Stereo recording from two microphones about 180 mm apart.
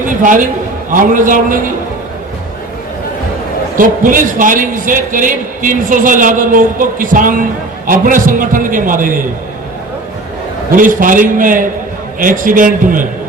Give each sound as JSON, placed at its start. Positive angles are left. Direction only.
{"t": 0.0, "sound": "a man's voice", "side_deg": -45}
{"t": 3.8, "sound": "a man's voice", "side_deg": -50}
{"t": 10.7, "sound": "a man's voice", "side_deg": -50}